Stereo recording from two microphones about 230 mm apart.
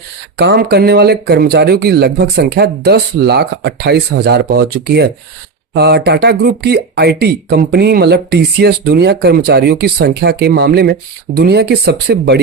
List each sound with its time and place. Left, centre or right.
0.3 s speech: right